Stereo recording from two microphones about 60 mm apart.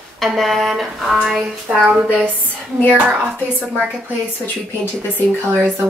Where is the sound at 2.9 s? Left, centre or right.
Centre.